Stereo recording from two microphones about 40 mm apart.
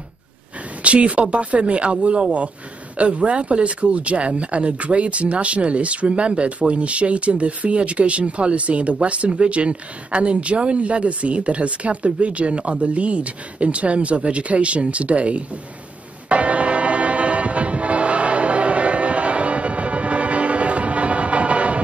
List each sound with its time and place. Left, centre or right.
0.8 s speech: right
16.3 s train: right